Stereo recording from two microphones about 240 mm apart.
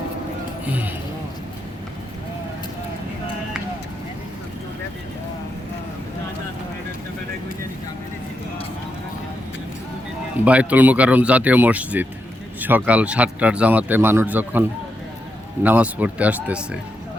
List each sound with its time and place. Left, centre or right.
0.7 s speech: centre
10.4 s speech: centre